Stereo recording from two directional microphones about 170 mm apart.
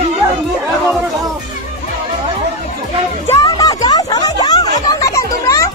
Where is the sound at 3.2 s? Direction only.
20° left (ahead or behind).